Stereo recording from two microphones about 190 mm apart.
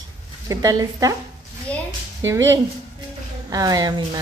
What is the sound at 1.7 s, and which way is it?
Speech, 5° left (ahead or behind).